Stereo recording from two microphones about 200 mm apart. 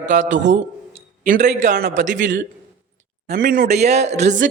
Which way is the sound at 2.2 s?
60° right (ahead or behind).